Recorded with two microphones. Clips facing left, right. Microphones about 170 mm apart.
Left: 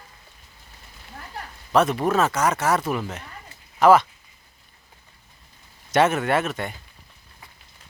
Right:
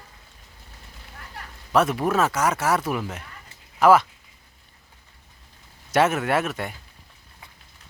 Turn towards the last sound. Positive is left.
turn(degrees=-5)  # may be behind; listen again after turning